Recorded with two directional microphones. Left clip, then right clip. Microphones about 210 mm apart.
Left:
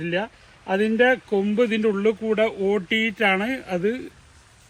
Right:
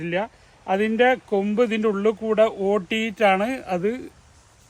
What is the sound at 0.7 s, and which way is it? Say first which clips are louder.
Speech: even; 30° right (ahead or behind).